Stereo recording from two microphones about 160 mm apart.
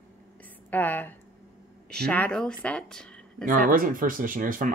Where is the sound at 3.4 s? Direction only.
55° right (ahead or behind).